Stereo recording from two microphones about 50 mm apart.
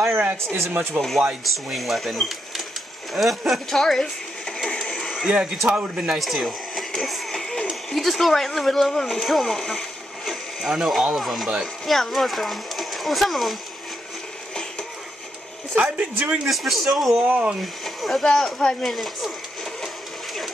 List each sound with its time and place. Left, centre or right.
0.2 s speech: right
1.0 s speech: right
1.4 s speech: centre
3.8 s a sound: centre
5.2 s speech: centre
6.1 s speech: centre
6.7 s a sound: centre
7.9 s speech: centre
10.7 s speech: centre
14.5 s a sound: centre
15.7 s speech: right
16.4 s speech: centre
17.2 s speech: right
17.8 s speech: centre